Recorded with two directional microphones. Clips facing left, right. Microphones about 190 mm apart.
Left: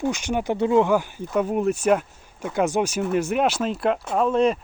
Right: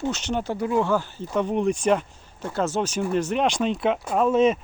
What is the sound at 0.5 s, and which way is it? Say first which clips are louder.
Speech: left 5 dB; 25° left (ahead or behind).